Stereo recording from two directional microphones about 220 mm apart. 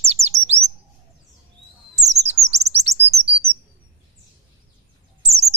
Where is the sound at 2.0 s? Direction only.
30° right (ahead or behind).